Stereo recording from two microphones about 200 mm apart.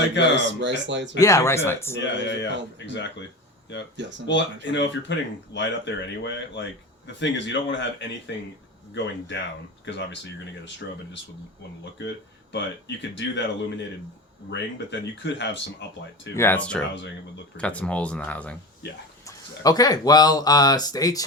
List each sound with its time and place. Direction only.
0.3 s speech: 65° right (ahead or behind)
1.2 s speech: 15° left (ahead or behind)
2.1 s speech: 60° left (ahead or behind)
4.3 s speech: 65° left (ahead or behind)
12.0 s speech: 60° left (ahead or behind)
14.5 s speech: 60° left (ahead or behind)
16.3 s speech: 10° left (ahead or behind)
19.6 s speech: 20° left (ahead or behind)